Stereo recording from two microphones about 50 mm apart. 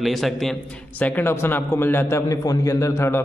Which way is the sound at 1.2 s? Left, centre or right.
Left.